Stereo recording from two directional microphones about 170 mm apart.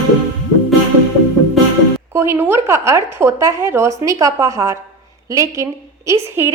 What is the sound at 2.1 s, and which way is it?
A woman's voice, 15° right (ahead or behind).